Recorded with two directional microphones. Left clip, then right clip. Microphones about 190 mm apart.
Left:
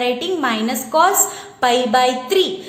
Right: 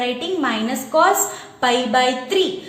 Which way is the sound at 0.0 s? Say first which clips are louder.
Left 2 dB; 25° left (ahead or behind).